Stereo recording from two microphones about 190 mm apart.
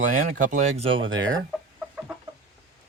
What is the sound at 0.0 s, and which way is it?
Speech, 40° right (ahead or behind).